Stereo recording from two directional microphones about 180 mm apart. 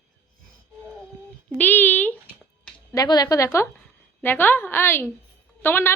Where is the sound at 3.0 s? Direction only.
20° left (ahead or behind).